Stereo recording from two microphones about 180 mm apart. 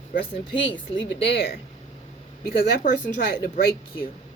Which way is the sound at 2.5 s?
55° left (ahead or behind).